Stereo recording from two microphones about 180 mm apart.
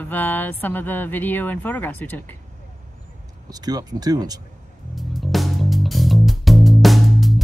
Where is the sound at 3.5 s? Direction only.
20° right (ahead or behind).